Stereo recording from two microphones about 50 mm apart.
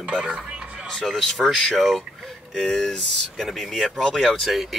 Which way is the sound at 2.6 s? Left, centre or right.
Centre.